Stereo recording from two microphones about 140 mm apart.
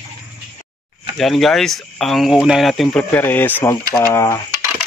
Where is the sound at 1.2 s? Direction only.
Centre (ahead or behind); by 4.4 s 20° left (ahead or behind).